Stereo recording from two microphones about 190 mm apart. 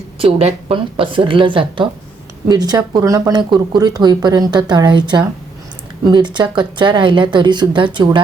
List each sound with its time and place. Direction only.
0.2 s speech: 30° right (ahead or behind)